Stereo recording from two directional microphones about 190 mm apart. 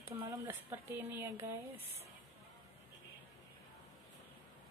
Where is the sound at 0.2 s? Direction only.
15° right (ahead or behind).